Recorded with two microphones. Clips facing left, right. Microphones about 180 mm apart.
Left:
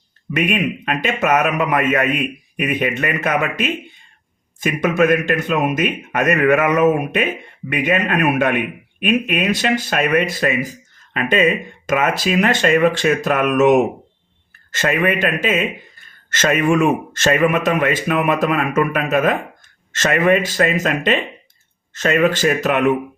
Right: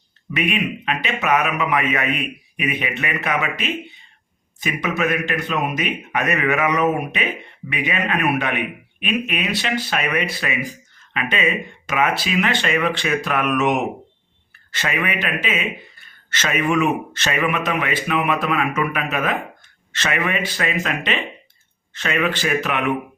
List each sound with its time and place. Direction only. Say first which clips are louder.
0.3 s speech: left 3 dB; 50° left (ahead or behind)